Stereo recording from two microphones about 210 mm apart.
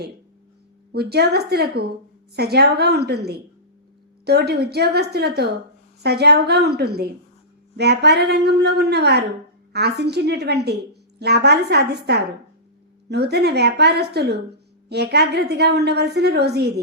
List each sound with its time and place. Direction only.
0.9 s a woman's voice: 50° right (ahead or behind)